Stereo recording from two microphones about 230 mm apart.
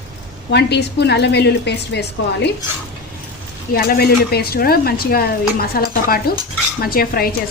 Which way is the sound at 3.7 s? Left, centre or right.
Left.